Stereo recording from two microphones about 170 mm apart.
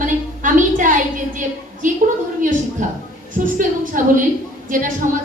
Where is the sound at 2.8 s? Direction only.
50° right (ahead or behind).